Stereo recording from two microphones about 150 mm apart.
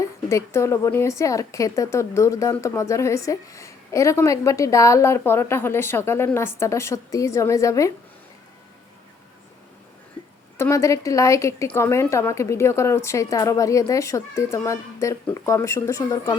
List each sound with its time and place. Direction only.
0.3 s a woman's voice: 20° left (ahead or behind)
10.6 s a woman's voice: 20° left (ahead or behind)